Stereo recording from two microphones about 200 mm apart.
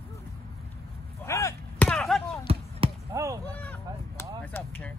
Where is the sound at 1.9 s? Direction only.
Centre (ahead or behind).